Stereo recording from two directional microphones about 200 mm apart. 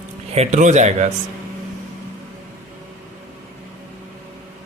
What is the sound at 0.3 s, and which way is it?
Speech, 35° right (ahead or behind).